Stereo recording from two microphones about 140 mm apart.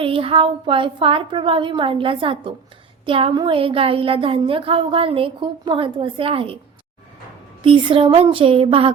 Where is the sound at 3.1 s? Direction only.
40° right (ahead or behind).